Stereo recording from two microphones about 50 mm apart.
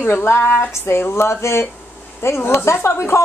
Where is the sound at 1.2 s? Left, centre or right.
Left.